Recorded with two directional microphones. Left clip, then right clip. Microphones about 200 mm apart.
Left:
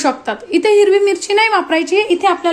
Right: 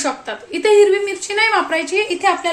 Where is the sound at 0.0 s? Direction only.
40° left (ahead or behind).